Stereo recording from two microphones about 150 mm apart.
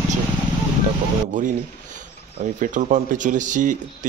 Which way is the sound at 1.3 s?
60° right (ahead or behind).